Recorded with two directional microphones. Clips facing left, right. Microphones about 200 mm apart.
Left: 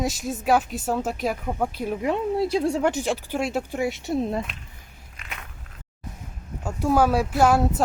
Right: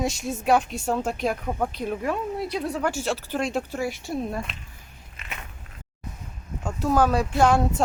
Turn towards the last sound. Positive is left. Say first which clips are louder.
# left 1 dB
turn(degrees=5)  # may be behind; listen again after turning